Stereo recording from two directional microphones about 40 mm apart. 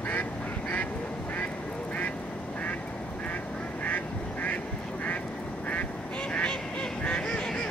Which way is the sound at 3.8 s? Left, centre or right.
Left.